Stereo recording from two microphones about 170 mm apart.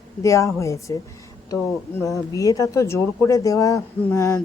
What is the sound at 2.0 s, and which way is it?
Speech, 20° left (ahead or behind).